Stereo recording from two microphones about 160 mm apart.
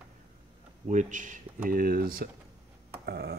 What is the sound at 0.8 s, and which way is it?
Speech, 50° right (ahead or behind).